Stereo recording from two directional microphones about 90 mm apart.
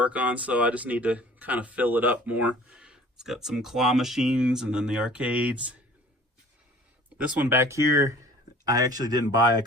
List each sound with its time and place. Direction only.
0.0 s speech: 15° right (ahead or behind)
7.2 s speech: 15° right (ahead or behind)
7.6 s speech: 35° right (ahead or behind)